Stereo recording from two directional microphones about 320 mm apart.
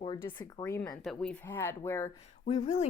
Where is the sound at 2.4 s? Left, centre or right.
Left.